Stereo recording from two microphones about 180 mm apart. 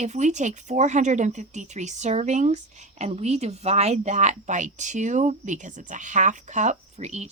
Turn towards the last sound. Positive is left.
turn(degrees=-40)  # may be behind; listen again after turning